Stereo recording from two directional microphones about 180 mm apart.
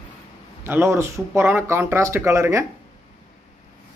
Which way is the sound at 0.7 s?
15° right (ahead or behind).